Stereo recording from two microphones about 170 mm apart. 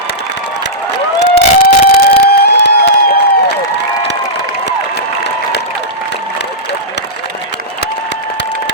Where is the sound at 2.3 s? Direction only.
70° left (ahead or behind).